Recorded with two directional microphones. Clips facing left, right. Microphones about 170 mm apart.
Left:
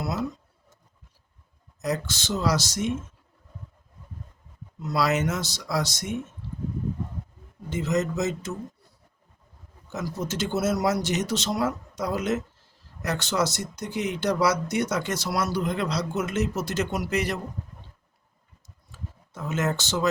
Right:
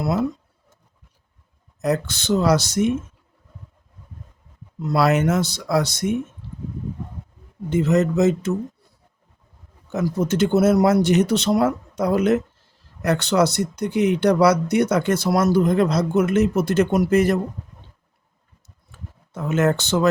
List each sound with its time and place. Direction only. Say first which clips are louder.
0.0 s speech: right 7 dB; 55° right (ahead or behind)
1.8 s speech: right 6 dB; 60° right (ahead or behind)
4.8 s speech: right 6 dB; 55° right (ahead or behind)
7.7 s speech: right 7 dB; 60° right (ahead or behind)
9.9 s speech: right 9 dB; 60° right (ahead or behind)
18.9 s a sound: even; 60° right (ahead or behind)